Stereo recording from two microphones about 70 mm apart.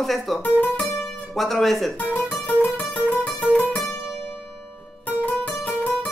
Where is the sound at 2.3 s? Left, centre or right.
Left.